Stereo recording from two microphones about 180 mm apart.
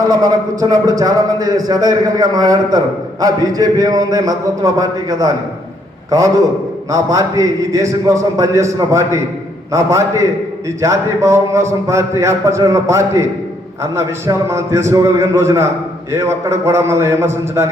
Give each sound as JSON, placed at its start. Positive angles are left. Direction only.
{"t": 0.1, "sound": "a man's voice", "side_deg": -20}